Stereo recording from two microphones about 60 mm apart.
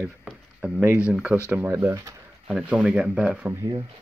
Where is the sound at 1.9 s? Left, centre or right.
Right.